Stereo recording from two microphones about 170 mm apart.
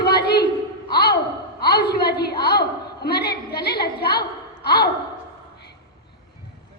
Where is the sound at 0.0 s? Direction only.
70° left (ahead or behind).